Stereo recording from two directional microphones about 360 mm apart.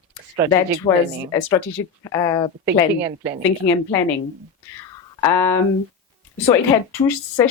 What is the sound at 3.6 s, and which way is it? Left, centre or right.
Speech, left.